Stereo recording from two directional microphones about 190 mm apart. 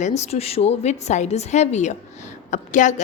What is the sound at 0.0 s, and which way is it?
A woman's voice, 35° left (ahead or behind).